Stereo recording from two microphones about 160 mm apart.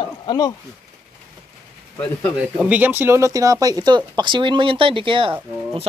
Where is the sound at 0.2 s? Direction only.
25° left (ahead or behind).